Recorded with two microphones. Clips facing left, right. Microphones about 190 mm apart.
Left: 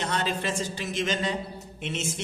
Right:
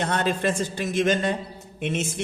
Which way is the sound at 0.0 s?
55° right (ahead or behind).